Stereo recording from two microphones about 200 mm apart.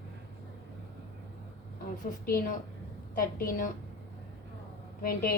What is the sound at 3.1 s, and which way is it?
Speech, 45° left (ahead or behind).